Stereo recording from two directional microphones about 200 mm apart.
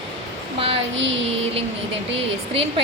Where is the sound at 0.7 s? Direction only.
65° right (ahead or behind).